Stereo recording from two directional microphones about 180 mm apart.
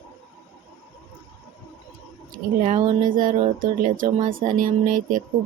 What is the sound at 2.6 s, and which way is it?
Speech, 45° right (ahead or behind).